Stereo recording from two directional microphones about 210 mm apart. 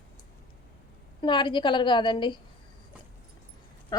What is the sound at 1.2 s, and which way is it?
A woman's voice, 20° left (ahead or behind).